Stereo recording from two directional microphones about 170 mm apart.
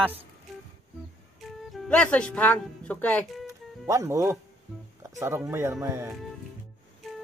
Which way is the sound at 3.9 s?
20° right (ahead or behind).